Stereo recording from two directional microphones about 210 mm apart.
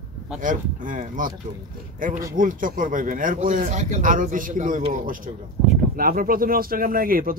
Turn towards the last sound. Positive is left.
turn(degrees=-45)  # may be behind; listen again after turning